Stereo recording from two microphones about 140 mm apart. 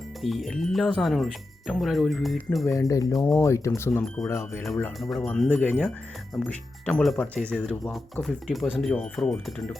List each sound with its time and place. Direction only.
0.2 s speech: centre (ahead or behind)
2.7 s speech: 25° left (ahead or behind)
3.1 s speech: 5° left (ahead or behind)
3.3 s speech: 20° left (ahead or behind)
4.9 s speech: centre (ahead or behind)